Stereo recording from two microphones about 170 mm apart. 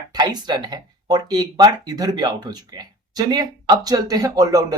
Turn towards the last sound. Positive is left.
turn(degrees=-20)  # may be behind; listen again after turning